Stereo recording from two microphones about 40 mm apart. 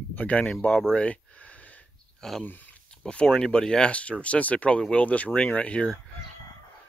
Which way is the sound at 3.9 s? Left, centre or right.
Left.